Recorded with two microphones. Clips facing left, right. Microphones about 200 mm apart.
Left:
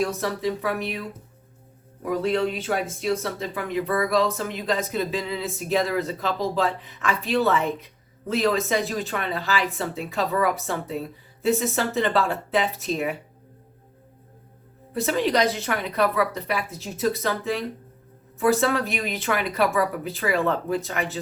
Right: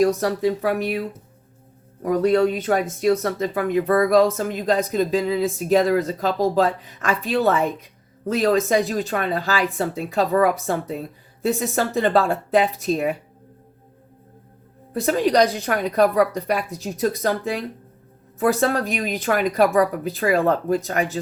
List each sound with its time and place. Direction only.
0.0 s speech: 40° right (ahead or behind)
11.4 s speech: 40° right (ahead or behind)
15.0 s speech: 40° right (ahead or behind)